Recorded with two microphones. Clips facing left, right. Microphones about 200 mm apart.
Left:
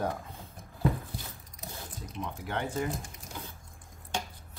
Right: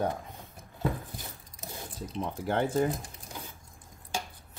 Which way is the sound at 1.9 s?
30° right (ahead or behind).